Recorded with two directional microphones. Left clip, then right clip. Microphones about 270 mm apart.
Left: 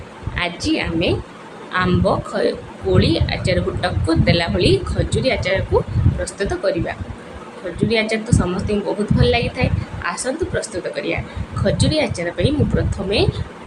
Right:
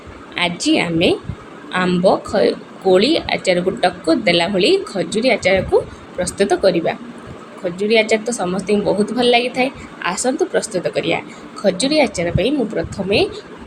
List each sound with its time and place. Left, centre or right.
0.3 s a woman's voice: centre